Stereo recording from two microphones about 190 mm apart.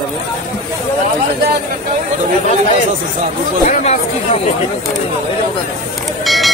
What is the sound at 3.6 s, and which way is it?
Speech, 40° left (ahead or behind).